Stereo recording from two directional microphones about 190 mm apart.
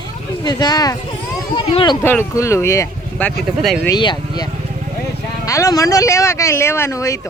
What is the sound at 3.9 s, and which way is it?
Speech, 20° left (ahead or behind).